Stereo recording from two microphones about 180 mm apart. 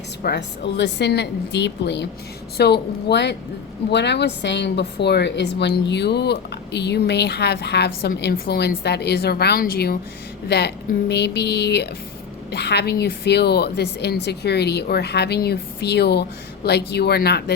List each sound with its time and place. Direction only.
0.2 s a woman's voice: 65° left (ahead or behind)
11.1 s a woman's voice: 70° left (ahead or behind)